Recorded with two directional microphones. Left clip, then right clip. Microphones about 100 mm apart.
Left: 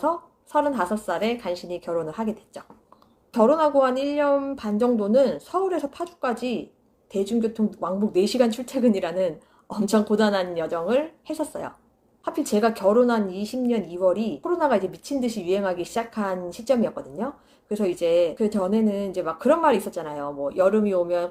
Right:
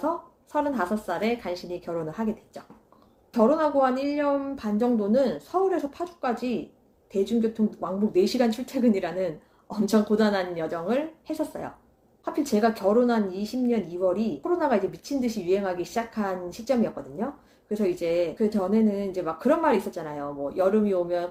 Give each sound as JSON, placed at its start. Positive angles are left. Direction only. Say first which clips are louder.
{"t": 0.5, "sound": "speech", "louder": "left 4 dB", "side_deg": 15}